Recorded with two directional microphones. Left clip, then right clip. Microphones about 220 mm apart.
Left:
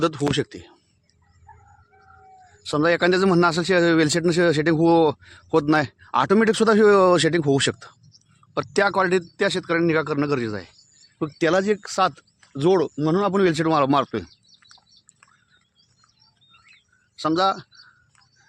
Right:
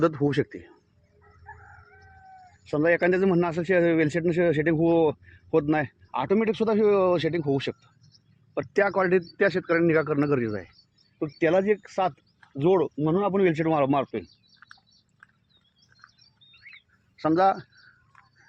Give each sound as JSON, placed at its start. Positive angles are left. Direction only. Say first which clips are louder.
{"t": 0.0, "sound": "speech", "louder": "left 1 dB", "side_deg": 20}
{"t": 2.6, "sound": "speech", "louder": "left 3 dB", "side_deg": 25}
{"t": 8.5, "sound": "speech", "louder": "left 3 dB", "side_deg": 15}
{"t": 11.3, "sound": "speech", "louder": "left 2 dB", "side_deg": 30}
{"t": 12.5, "sound": "speech", "louder": "left 3 dB", "side_deg": 35}
{"t": 17.2, "sound": "speech", "louder": "left 1 dB", "side_deg": 5}